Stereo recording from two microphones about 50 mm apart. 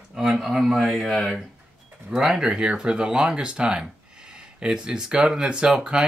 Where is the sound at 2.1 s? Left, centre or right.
Centre.